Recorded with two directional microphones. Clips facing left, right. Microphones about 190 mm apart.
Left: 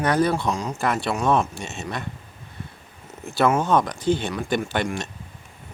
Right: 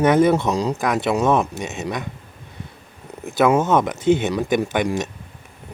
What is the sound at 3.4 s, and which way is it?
Speech, 20° right (ahead or behind).